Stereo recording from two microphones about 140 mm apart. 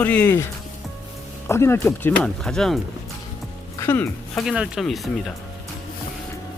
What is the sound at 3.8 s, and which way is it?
Speech, 15° left (ahead or behind).